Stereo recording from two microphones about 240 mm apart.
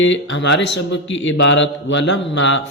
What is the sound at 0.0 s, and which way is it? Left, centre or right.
Speech, left.